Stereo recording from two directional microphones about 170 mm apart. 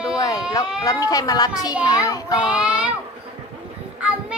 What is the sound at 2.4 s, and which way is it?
Speech, 5° right (ahead or behind).